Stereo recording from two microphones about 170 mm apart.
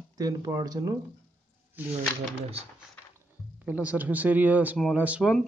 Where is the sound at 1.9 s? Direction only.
40° right (ahead or behind).